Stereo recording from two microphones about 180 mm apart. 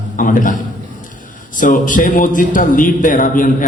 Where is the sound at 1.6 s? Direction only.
45° left (ahead or behind).